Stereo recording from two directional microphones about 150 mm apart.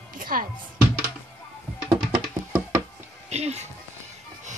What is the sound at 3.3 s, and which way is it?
Speech, 45° right (ahead or behind).